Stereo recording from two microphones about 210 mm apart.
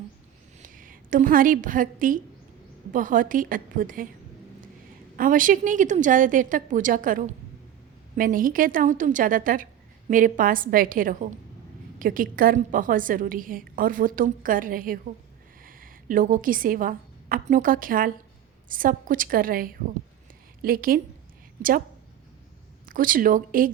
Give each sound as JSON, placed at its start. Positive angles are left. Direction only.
{"t": 0.6, "sound": "a woman's voice", "side_deg": -40}
{"t": 5.1, "sound": "a woman's voice", "side_deg": -40}
{"t": 22.9, "sound": "a woman's voice", "side_deg": -40}